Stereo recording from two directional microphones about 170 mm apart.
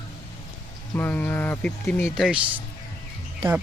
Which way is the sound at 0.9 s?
10° left (ahead or behind).